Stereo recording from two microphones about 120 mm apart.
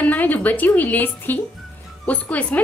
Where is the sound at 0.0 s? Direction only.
15° left (ahead or behind).